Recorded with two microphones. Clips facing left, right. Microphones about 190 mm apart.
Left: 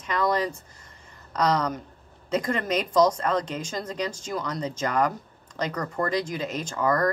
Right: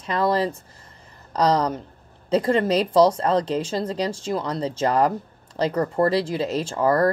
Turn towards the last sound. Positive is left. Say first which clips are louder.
# right 5 dB
turn(degrees=-30)  # may be behind; listen again after turning